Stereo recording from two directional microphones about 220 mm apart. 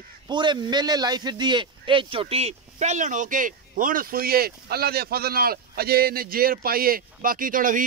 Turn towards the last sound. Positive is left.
turn(degrees=-40)  # may be behind; listen again after turning